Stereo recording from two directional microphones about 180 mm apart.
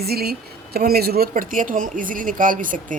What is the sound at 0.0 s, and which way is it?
Speech, 60° right (ahead or behind).